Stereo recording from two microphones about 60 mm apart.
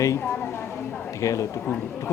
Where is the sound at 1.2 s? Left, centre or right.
Left.